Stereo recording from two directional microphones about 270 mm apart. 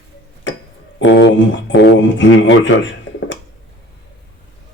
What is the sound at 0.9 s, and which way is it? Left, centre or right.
Speech, left.